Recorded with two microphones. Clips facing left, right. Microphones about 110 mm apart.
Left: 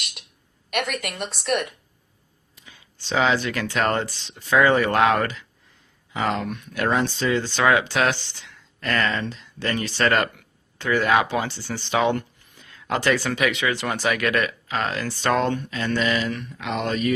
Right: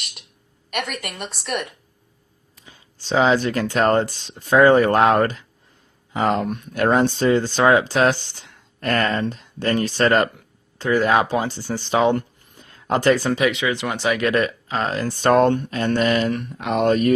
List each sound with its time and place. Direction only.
0.7 s a woman's voice: centre (ahead or behind)
2.6 s speech: 35° right (ahead or behind)
10.1 s a sound: 35° right (ahead or behind)
11.2 s speech: 40° right (ahead or behind)
13.4 s speech: 20° right (ahead or behind); by 17.2 s 50° right (ahead or behind)